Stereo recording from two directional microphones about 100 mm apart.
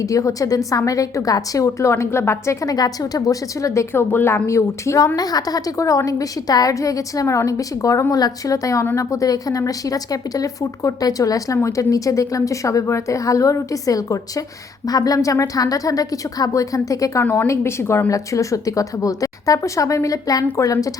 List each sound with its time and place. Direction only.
0.0 s a woman's voice: 35° left (ahead or behind)